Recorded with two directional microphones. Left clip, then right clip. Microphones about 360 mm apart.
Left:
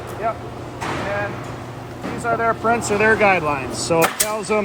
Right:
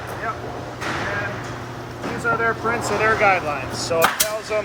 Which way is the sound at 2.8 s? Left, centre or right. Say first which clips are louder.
Even; left.